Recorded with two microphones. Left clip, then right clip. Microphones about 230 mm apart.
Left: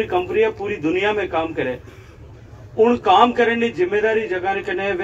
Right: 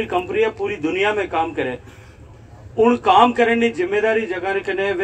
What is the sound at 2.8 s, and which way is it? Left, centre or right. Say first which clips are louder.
A man's voice: even; right.